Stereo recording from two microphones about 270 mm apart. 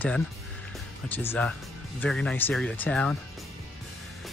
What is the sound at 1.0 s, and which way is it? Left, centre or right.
Speech, centre.